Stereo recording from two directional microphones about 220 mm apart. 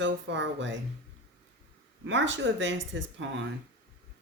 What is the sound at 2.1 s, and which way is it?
Speech, 55° right (ahead or behind).